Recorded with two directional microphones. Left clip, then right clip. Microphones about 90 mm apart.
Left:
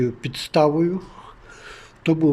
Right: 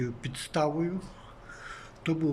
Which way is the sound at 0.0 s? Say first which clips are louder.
Left 11 dB; 45° left (ahead or behind).